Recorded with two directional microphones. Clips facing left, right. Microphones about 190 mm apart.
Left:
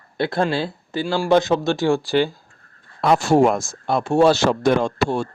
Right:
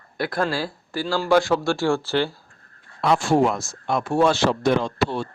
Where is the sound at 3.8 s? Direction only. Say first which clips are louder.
Left 4 dB; 30° left (ahead or behind); by 5.3 s 50° left (ahead or behind).